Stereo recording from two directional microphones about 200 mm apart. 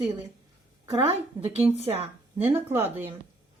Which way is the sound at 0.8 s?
15° right (ahead or behind).